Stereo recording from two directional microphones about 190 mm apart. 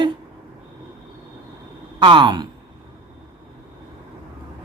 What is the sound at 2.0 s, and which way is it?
Speech, 25° right (ahead or behind).